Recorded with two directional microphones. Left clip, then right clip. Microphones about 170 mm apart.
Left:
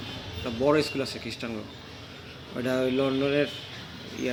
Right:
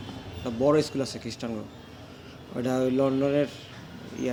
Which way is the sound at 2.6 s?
20° right (ahead or behind).